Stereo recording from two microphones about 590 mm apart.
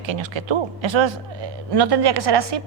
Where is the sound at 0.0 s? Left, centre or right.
Right.